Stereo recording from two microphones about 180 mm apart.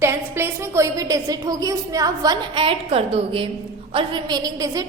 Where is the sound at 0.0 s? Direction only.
15° right (ahead or behind).